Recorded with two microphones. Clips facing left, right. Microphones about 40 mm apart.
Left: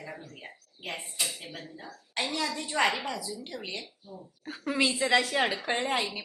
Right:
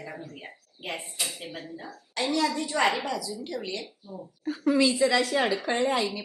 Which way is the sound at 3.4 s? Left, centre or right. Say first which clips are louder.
Right 5 dB; left.